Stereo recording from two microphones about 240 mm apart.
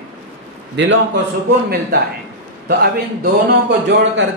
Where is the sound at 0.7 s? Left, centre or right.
Right.